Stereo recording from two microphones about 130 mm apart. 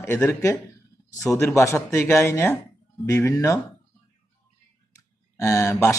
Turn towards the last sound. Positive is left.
turn(degrees=20)  # may be behind; listen again after turning